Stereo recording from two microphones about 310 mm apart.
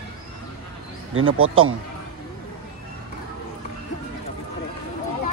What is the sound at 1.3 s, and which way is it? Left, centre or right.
Speech, right.